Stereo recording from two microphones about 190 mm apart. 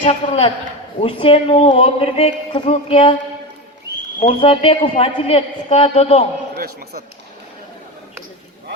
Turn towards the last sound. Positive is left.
turn(degrees=-55)  # may be behind; listen again after turning